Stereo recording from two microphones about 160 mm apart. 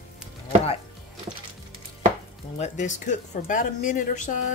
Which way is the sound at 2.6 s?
50° left (ahead or behind).